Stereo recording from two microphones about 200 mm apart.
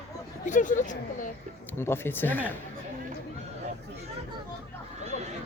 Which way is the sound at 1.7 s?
10° left (ahead or behind).